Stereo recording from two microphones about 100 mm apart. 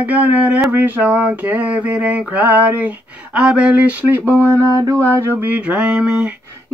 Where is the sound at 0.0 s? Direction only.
15° right (ahead or behind).